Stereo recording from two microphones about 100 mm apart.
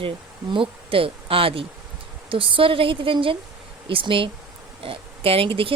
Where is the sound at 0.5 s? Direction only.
65° right (ahead or behind).